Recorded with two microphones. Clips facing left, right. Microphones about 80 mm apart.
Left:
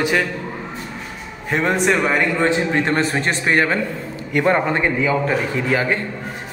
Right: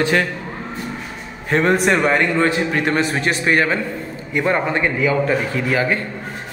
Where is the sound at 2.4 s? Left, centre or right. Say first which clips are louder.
Even; left.